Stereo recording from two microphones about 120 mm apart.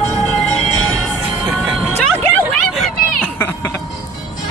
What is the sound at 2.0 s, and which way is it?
Vehicle, 5° left (ahead or behind).